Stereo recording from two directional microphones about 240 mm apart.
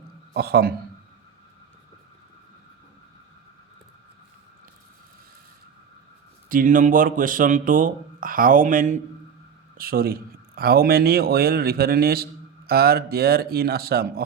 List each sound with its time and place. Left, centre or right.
0.3 s a man's voice: right
6.5 s a man's voice: right